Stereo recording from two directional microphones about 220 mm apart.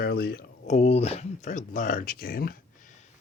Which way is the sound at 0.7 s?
30° left (ahead or behind).